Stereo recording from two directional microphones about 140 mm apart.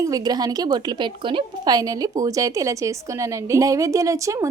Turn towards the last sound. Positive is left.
turn(degrees=-20)  # may be behind; listen again after turning